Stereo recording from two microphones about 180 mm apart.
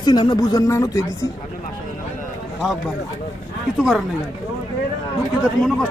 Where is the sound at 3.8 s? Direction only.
Centre (ahead or behind).